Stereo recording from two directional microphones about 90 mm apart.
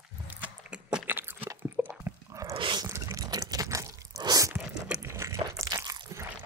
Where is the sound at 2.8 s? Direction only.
35° right (ahead or behind).